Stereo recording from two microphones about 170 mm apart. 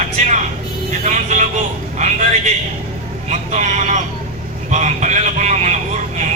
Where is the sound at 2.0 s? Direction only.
45° right (ahead or behind).